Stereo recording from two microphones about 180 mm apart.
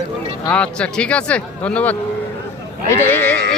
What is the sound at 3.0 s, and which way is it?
Speech, 10° left (ahead or behind).